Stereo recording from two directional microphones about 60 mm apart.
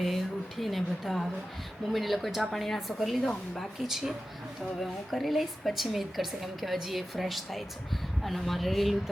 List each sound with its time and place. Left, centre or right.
0.0 s a woman's voice: centre
3.8 s a woman's voice: centre